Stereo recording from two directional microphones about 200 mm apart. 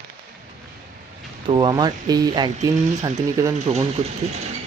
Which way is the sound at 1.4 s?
20° right (ahead or behind).